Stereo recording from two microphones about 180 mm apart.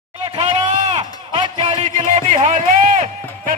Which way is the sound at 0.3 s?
25° right (ahead or behind).